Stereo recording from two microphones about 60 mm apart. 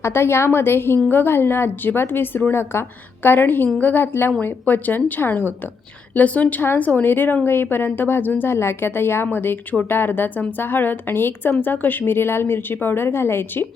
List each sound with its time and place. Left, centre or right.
0.0 s a woman's voice: left